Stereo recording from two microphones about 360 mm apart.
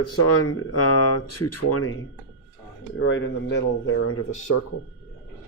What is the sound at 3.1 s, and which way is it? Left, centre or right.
Speech, left.